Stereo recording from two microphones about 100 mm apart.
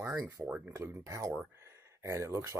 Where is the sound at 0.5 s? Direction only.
15° right (ahead or behind).